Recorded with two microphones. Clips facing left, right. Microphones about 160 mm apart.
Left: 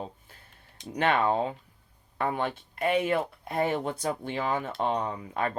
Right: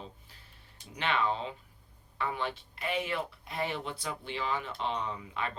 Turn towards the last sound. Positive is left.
turn(degrees=50)  # may be behind; listen again after turning